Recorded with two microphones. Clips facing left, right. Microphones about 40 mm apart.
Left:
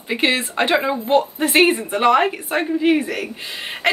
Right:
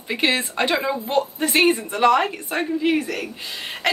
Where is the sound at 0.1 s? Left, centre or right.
Centre.